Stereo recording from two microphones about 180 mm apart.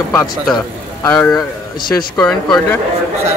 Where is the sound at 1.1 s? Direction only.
5° left (ahead or behind).